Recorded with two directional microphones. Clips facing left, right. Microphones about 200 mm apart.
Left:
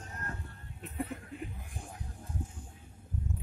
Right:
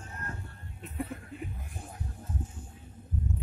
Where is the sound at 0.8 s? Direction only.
Centre (ahead or behind).